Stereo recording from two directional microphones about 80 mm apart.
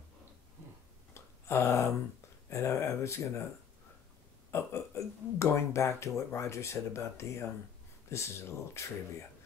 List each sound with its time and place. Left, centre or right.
1.1 s a sound: left
2.5 s speech: left
4.5 s speech: left